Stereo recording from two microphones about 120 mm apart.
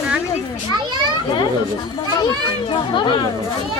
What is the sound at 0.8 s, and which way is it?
Speech, 40° right (ahead or behind).